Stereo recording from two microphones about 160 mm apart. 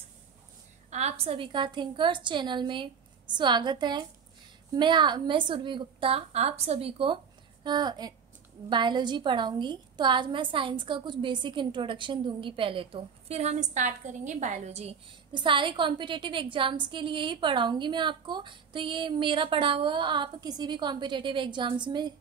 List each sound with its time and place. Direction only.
0.8 s a woman's voice: 45° right (ahead or behind)
15.3 s a woman's voice: 30° right (ahead or behind)